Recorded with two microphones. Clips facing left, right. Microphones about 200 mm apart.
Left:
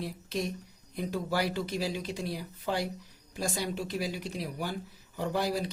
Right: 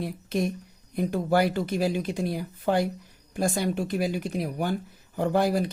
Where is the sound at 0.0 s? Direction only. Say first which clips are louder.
Right 6 dB; 55° right (ahead or behind).